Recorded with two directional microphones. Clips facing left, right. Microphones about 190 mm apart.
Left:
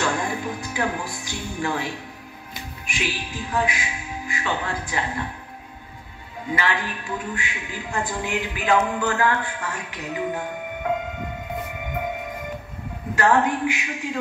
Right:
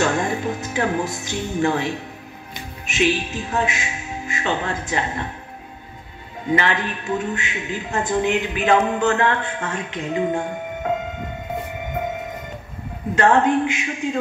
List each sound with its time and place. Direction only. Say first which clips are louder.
0.0 s music: right 4 dB; 25° right (ahead or behind)
1.1 s a man's voice: right 6 dB; 20° right (ahead or behind)
6.5 s a man's voice: right 5 dB; 20° right (ahead or behind)
13.1 s a man's voice: right 4 dB; 25° right (ahead or behind)